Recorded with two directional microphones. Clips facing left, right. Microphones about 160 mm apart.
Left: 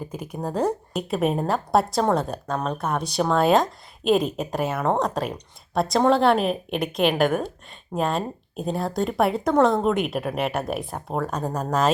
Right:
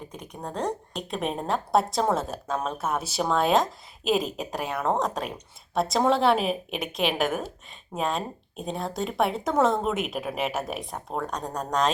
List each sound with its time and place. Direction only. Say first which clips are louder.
0.1 s speech: left 7 dB; 5° left (ahead or behind)